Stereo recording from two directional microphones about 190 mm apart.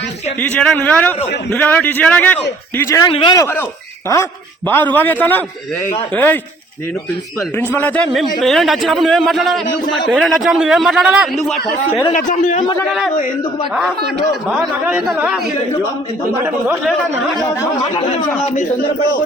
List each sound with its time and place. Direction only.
0.3 s a man's voice: 10° left (ahead or behind)
3.1 s a man's voice: 30° left (ahead or behind)
3.3 s a man's voice: 15° left (ahead or behind)
7.8 s a man's voice: 10° left (ahead or behind)
12.1 s speech: 40° left (ahead or behind)
14.8 s a man's voice: 5° right (ahead or behind)
18.4 s speech: 35° left (ahead or behind)